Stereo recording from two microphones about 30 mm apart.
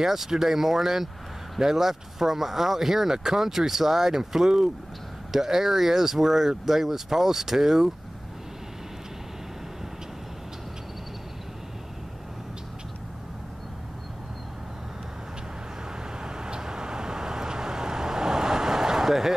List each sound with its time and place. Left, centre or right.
0.0 s speech: centre
16.2 s vehicle: right